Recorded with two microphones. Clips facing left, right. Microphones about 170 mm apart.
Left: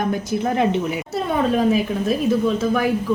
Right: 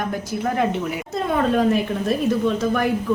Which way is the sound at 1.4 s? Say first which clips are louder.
Left 1 dB; 5° left (ahead or behind).